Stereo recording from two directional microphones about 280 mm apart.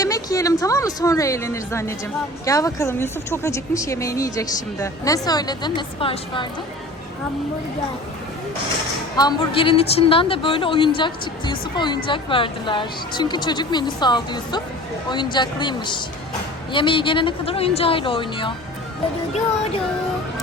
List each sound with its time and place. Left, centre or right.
0.0 s a woman's voice: centre
9.1 s speech: centre